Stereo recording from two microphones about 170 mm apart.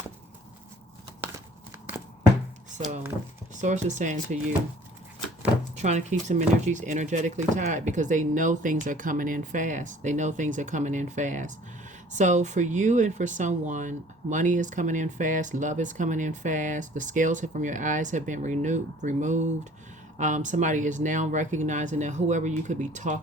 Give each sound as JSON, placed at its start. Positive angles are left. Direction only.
{"t": 2.7, "sound": "speech", "side_deg": -45}
{"t": 5.7, "sound": "speech", "side_deg": -45}